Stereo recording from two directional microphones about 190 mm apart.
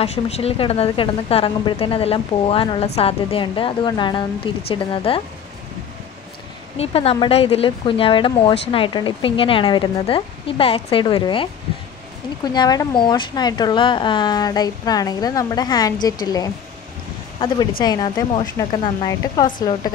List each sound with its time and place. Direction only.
0.0 s speech: 30° left (ahead or behind)
6.8 s speech: 30° left (ahead or behind)
12.5 s speech: 20° left (ahead or behind)